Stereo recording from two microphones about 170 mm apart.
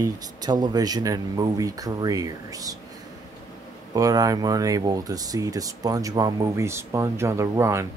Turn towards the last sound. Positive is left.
turn(degrees=-15)  # may be behind; listen again after turning